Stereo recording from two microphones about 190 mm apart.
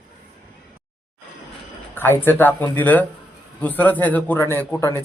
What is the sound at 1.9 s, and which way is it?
A man's voice, 10° left (ahead or behind).